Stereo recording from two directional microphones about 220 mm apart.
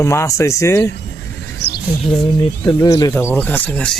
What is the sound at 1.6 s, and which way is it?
Bird, 50° left (ahead or behind).